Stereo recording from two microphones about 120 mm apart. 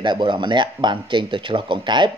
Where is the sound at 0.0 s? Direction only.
40° right (ahead or behind).